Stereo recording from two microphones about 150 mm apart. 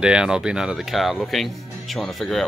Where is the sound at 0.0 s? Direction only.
5° right (ahead or behind).